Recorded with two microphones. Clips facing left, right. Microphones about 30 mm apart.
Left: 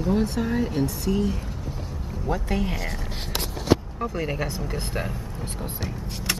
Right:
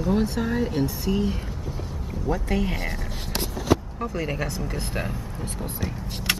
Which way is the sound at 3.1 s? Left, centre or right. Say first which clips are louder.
Even; left.